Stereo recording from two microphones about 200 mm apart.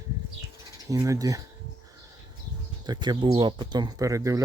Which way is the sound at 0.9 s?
15° right (ahead or behind).